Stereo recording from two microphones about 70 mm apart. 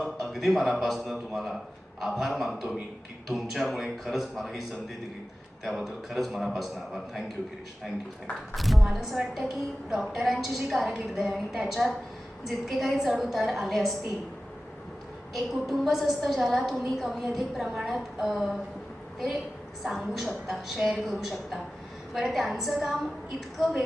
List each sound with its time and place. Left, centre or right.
0.0 s a woman's voice: centre
5.6 s a woman's voice: centre
8.5 s a woman's voice: centre
15.3 s a woman's voice: centre
19.8 s a woman's voice: centre